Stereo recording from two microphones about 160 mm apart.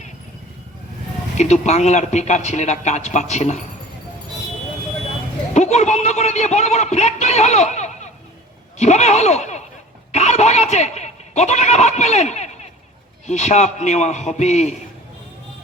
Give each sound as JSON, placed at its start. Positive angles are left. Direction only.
{"t": 1.4, "sound": "a man's voice", "side_deg": 45}
{"t": 5.5, "sound": "a man's voice", "side_deg": 45}